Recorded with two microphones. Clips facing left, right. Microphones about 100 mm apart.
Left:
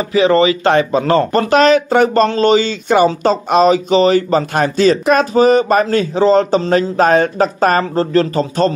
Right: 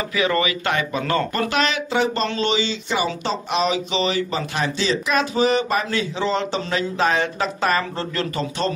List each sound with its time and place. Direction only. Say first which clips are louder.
0.1 s speech: left 11 dB; 30° left (ahead or behind)